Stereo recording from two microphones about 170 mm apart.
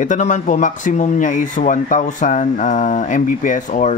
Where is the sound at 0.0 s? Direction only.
45° left (ahead or behind).